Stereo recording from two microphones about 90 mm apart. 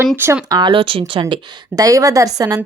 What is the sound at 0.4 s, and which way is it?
Speech, 55° right (ahead or behind).